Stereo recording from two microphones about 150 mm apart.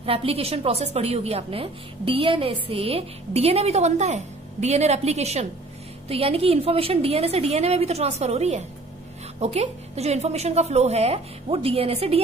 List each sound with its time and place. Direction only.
0.0 s a woman's voice: 40° right (ahead or behind)